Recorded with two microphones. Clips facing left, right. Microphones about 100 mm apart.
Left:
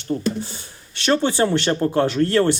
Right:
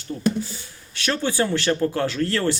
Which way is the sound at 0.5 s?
25° left (ahead or behind).